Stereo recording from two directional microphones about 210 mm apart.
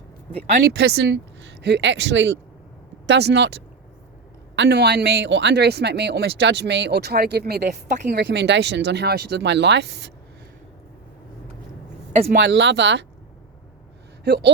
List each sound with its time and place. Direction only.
0.6 s a man's voice: 50° right (ahead or behind)
12.4 s speech: 55° right (ahead or behind)
14.3 s a man's voice: 50° right (ahead or behind)